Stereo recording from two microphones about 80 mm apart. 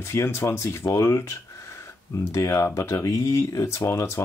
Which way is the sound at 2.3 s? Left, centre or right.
Left.